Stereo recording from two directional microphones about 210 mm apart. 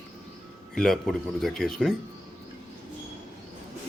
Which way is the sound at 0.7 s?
Centre (ahead or behind).